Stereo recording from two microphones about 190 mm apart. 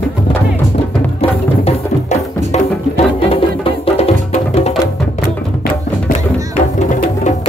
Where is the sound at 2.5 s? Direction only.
30° left (ahead or behind).